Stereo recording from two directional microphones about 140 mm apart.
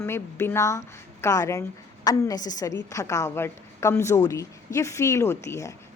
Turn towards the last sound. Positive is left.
turn(degrees=20)  # may be behind; listen again after turning